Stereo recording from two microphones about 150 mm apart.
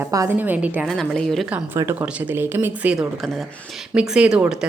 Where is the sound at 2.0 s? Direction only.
10° right (ahead or behind).